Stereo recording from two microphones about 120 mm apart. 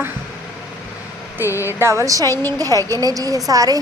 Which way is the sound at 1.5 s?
25° left (ahead or behind).